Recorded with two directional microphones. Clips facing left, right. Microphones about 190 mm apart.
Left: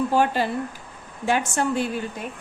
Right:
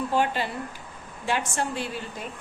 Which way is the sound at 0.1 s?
40° left (ahead or behind).